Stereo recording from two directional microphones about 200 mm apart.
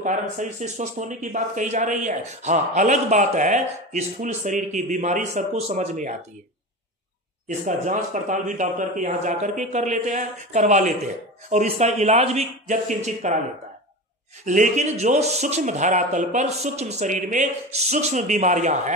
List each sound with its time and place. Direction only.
0.0 s speech: 40° right (ahead or behind)
7.4 s speech: 35° right (ahead or behind)
14.4 s speech: 40° right (ahead or behind)